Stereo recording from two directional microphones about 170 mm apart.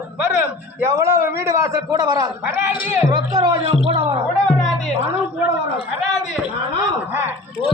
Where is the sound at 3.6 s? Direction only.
35° right (ahead or behind).